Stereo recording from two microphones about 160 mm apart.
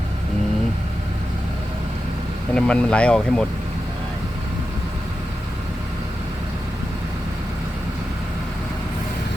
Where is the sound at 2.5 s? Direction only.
5° left (ahead or behind).